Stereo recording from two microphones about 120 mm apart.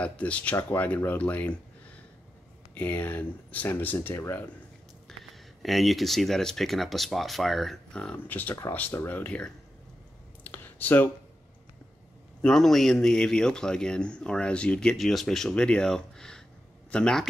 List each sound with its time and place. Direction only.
0.0 s speech: 10° left (ahead or behind)
2.7 s speech: 15° left (ahead or behind)
5.6 s speech: centre (ahead or behind)
10.4 s computer keyboard: 15° left (ahead or behind)
12.4 s speech: 5° left (ahead or behind)